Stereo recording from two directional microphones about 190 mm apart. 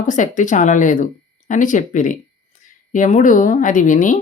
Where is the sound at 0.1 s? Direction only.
40° left (ahead or behind).